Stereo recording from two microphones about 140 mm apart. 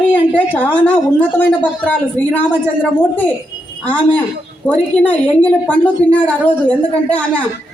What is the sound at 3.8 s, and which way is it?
Speech, 10° left (ahead or behind).